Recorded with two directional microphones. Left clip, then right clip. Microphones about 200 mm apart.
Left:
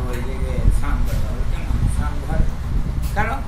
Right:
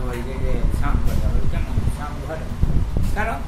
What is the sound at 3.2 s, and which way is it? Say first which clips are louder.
Speech: left 2 dB; 15° right (ahead or behind).